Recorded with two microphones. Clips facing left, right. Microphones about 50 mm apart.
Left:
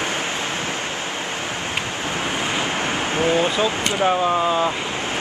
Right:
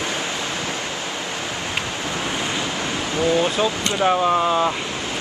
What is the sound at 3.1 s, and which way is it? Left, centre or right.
Speech, left.